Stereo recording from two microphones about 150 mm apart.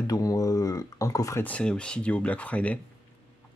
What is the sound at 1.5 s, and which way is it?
Speech, 5° left (ahead or behind).